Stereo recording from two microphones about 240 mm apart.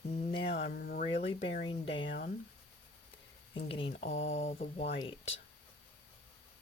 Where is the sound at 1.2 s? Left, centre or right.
Left.